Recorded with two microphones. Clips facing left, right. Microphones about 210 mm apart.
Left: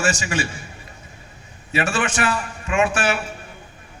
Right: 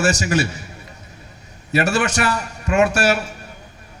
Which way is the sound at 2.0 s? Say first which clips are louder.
Right 2 dB; 40° right (ahead or behind).